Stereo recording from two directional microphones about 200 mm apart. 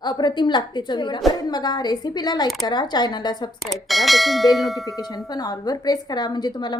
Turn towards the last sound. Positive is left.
turn(degrees=20)  # may be behind; listen again after turning